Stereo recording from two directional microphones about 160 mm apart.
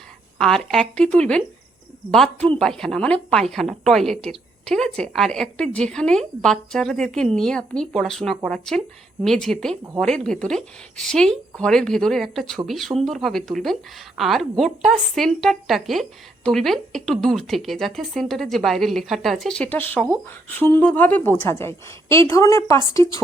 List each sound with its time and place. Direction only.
0.3 s a woman's voice: 5° left (ahead or behind); by 23.2 s 20° left (ahead or behind)